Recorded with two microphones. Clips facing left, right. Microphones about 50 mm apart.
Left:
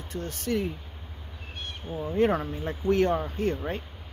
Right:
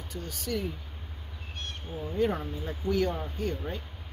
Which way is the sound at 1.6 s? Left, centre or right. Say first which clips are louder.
Left 3 dB; centre.